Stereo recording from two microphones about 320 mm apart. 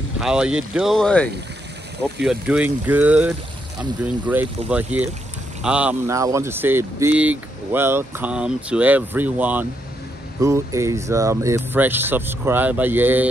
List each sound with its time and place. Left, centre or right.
0.2 s speech: centre